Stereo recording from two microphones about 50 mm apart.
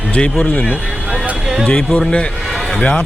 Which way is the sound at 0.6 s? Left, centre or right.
Right.